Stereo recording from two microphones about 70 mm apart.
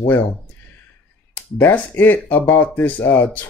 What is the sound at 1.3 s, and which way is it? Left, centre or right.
Speech, left.